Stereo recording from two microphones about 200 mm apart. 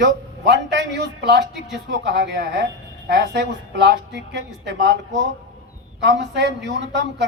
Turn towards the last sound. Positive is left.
turn(degrees=-60)  # may be behind; listen again after turning